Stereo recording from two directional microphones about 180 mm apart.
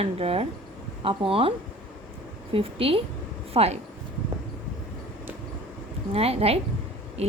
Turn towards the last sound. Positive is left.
turn(degrees=-35)  # may be behind; listen again after turning